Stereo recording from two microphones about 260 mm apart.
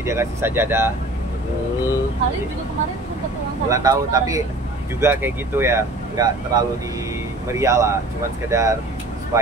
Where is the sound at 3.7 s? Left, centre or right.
Centre.